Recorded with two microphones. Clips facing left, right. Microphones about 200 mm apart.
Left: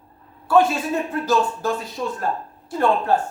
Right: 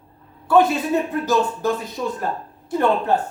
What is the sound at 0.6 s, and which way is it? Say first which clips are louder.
Speech: right 2 dB; 20° right (ahead or behind).